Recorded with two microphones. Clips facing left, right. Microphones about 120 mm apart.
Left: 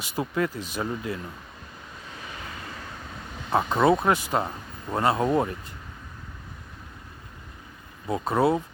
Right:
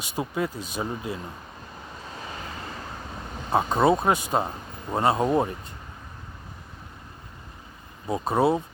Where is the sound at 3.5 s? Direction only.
20° right (ahead or behind).